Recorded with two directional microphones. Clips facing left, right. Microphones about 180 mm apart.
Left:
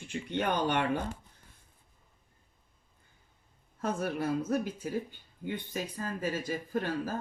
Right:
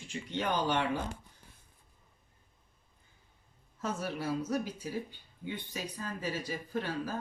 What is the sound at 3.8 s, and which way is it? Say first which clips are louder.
Speech: left 4 dB; 55° left (ahead or behind).